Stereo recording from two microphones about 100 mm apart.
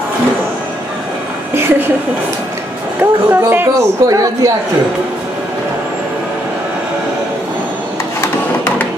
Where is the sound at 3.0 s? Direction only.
25° right (ahead or behind).